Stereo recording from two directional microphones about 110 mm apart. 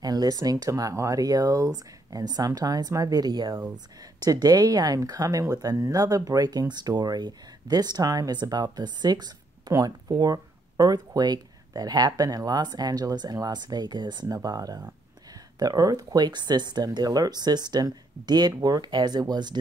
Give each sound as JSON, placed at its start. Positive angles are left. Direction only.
{"t": 0.0, "sound": "speech", "side_deg": -35}